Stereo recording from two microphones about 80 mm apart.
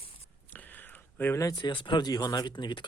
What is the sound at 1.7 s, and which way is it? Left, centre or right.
Speech, left.